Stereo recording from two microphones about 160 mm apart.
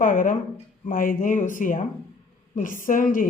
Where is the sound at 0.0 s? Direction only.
55° left (ahead or behind).